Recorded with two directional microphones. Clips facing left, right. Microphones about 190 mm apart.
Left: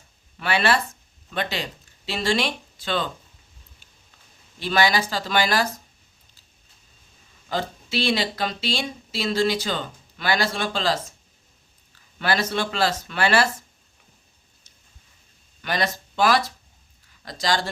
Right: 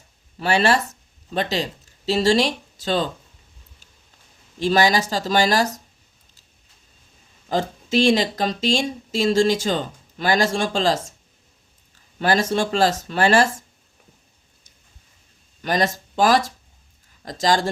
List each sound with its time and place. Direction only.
0.3 s speech: 40° right (ahead or behind)
4.6 s speech: 40° right (ahead or behind)
7.4 s speech: 45° right (ahead or behind)
12.2 s speech: 45° right (ahead or behind)
15.6 s speech: 45° right (ahead or behind)